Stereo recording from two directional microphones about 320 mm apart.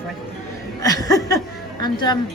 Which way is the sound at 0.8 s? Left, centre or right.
Centre.